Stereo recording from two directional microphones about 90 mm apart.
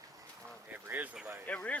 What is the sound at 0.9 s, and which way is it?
Speech, 25° right (ahead or behind).